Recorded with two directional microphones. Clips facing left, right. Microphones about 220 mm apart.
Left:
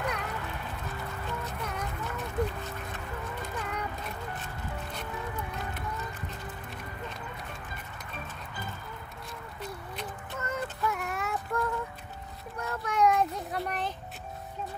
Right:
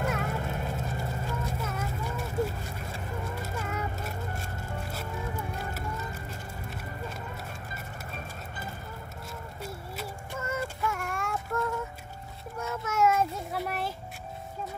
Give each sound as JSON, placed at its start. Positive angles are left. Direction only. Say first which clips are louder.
{"t": 0.2, "sound": "music", "louder": "right 5 dB", "side_deg": -45}
{"t": 1.4, "sound": "music", "louder": "right 2 dB", "side_deg": -5}
{"t": 3.5, "sound": "a sound", "louder": "right 1 dB", "side_deg": -5}
{"t": 9.6, "sound": "child singing", "louder": "even", "side_deg": -5}